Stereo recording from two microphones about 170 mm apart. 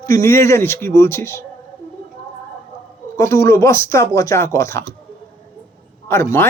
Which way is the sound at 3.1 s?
15° left (ahead or behind).